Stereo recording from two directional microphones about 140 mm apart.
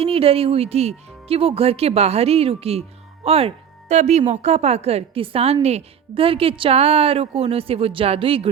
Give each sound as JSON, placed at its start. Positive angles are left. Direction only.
{"t": 0.0, "sound": "speech", "side_deg": -45}